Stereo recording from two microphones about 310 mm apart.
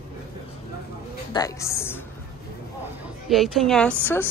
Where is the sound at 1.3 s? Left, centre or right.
Centre.